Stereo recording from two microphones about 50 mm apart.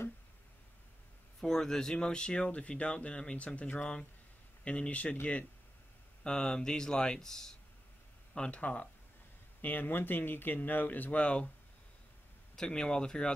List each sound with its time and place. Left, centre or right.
1.4 s speech: centre
6.2 s speech: centre
8.4 s speech: left
9.6 s speech: left
12.5 s speech: centre